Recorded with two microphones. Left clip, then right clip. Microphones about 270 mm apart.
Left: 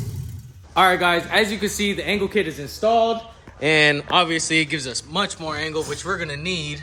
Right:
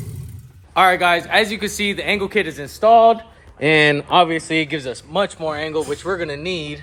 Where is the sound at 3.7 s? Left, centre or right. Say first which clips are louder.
Right 3 dB; right.